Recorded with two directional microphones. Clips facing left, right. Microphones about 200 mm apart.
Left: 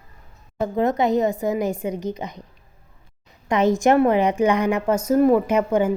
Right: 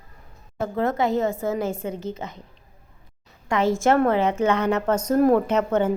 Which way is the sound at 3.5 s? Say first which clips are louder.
Left 3 dB; 20° left (ahead or behind).